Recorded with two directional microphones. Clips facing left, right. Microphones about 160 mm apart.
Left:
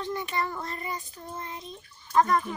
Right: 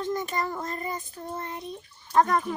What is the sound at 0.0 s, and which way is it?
Child singing, 40° right (ahead or behind).